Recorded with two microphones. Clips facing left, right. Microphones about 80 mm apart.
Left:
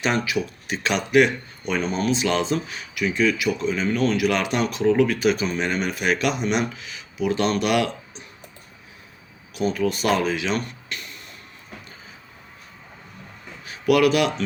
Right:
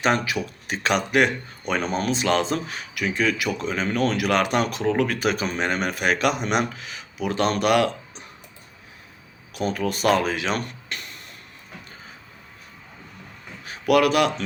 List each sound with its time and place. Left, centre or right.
0.0 s speech: right
9.6 s speech: right
13.7 s a sound: right